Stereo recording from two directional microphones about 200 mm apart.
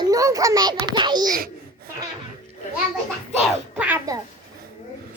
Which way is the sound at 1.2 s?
45° right (ahead or behind).